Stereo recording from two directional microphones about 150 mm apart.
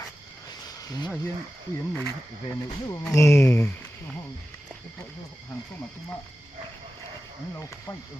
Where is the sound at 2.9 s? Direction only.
20° left (ahead or behind).